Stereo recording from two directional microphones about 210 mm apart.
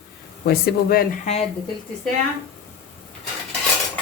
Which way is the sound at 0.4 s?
45° left (ahead or behind).